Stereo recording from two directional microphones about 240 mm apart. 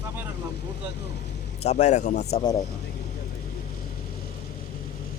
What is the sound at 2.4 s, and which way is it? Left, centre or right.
Speech, centre.